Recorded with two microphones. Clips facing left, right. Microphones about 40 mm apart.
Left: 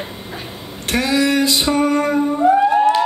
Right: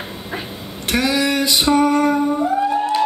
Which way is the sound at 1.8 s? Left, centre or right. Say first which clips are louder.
Right 1 dB; left.